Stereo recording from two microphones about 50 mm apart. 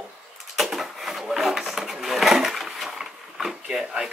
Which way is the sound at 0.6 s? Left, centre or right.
Centre.